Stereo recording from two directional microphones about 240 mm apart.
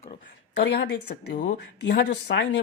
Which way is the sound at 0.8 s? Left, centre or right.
Left.